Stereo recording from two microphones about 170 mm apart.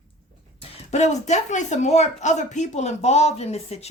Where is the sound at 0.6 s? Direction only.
40° left (ahead or behind).